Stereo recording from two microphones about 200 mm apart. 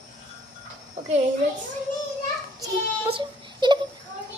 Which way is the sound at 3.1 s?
25° right (ahead or behind).